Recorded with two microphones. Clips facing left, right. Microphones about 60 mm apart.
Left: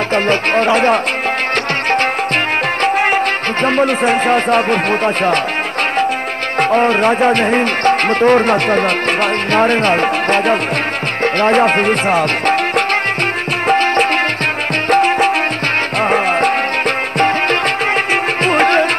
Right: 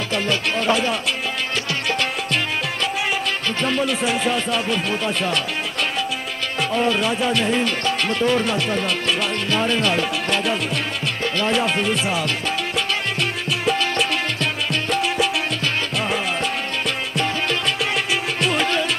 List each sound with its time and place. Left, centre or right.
0.1 s speech: left
2.8 s music: left
3.6 s speech: left
6.6 s speech: left
11.2 s music: left
18.4 s music: left